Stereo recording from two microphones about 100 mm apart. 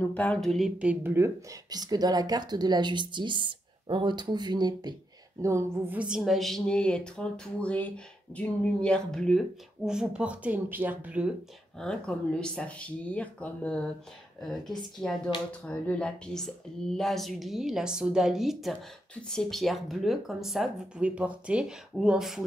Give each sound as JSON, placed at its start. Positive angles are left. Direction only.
{"t": 0.0, "sound": "speech", "side_deg": 15}
{"t": 0.4, "sound": "speech", "side_deg": 0}
{"t": 0.8, "sound": "speech", "side_deg": -25}
{"t": 1.7, "sound": "speech", "side_deg": -40}
{"t": 5.4, "sound": "speech", "side_deg": -30}
{"t": 5.9, "sound": "speech", "side_deg": -5}
{"t": 9.8, "sound": "a woman's voice", "side_deg": -5}
{"t": 11.8, "sound": "speech", "side_deg": 5}
{"t": 14.4, "sound": "speech", "side_deg": 0}